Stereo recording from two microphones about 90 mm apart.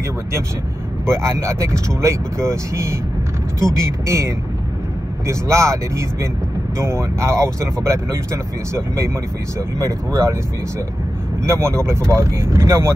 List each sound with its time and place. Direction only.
1.0 s speech: 30° right (ahead or behind)
11.4 s speech: 35° right (ahead or behind)